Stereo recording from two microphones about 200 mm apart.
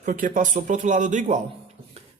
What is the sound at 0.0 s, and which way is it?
A man's voice, 40° right (ahead or behind).